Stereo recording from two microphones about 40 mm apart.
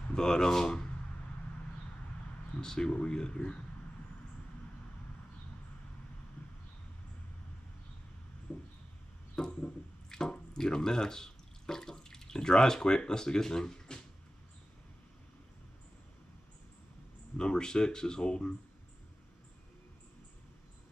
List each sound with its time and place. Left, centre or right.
0.1 s speech: centre
2.6 s speech: centre
8.5 s a sound: left
9.3 s drip: centre
17.4 s speech: centre